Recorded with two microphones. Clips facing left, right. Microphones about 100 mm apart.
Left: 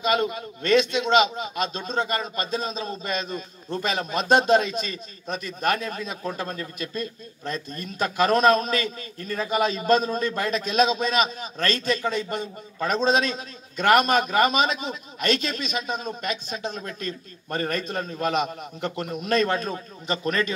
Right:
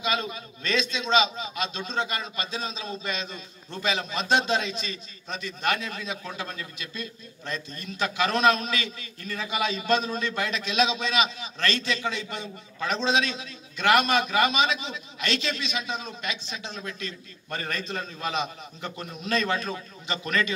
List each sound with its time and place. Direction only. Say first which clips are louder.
0.0 s a man's voice: left 6 dB; 55° left (ahead or behind)